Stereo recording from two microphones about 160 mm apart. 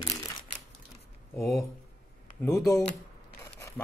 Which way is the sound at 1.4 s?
Centre (ahead or behind).